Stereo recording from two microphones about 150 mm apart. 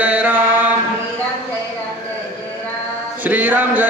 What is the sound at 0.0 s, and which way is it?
Chant, 10° right (ahead or behind).